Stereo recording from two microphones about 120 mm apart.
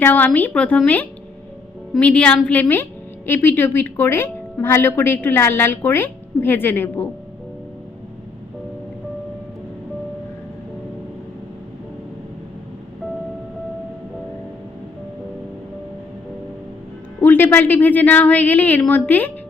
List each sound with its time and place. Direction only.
0.0 s a woman's voice: 15° left (ahead or behind)
2.0 s a woman's voice: 10° left (ahead or behind)
17.2 s a woman's voice: 15° left (ahead or behind)